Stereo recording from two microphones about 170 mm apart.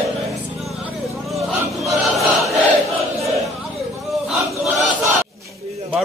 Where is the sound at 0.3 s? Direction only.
Centre (ahead or behind).